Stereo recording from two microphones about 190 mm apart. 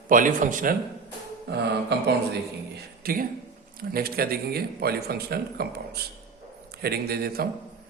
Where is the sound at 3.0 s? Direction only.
50° right (ahead or behind).